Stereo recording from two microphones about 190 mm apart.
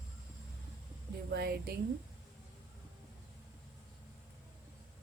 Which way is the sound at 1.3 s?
55° right (ahead or behind).